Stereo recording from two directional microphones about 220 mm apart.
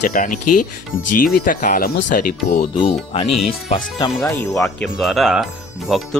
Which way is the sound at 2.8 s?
25° left (ahead or behind).